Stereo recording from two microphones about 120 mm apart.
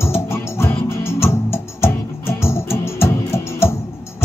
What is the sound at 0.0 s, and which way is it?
Music, 20° left (ahead or behind).